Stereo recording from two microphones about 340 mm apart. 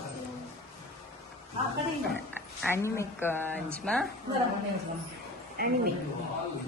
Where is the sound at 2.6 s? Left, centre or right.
Centre.